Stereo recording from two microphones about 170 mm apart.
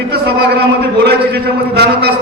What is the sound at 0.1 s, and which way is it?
A man's voice, 75° right (ahead or behind).